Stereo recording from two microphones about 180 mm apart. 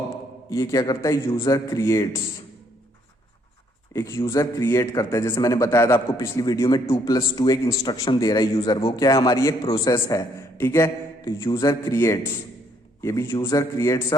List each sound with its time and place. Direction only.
0.5 s a man's voice: 20° left (ahead or behind)
3.9 s a man's voice: 15° left (ahead or behind)